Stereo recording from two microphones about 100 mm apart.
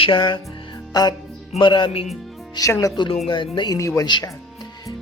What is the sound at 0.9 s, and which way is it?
Speech, 45° left (ahead or behind).